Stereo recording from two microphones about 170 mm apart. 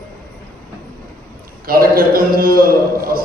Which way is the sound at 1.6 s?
60° right (ahead or behind).